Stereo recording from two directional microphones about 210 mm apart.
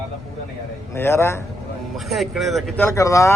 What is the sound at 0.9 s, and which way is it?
Speech, 10° left (ahead or behind).